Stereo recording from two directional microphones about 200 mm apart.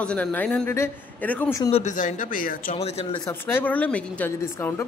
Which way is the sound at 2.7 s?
30° left (ahead or behind).